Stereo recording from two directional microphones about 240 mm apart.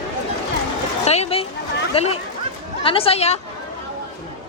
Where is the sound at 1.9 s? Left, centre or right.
Left.